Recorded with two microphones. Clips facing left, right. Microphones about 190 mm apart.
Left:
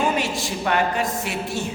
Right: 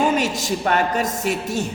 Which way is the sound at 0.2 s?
40° right (ahead or behind).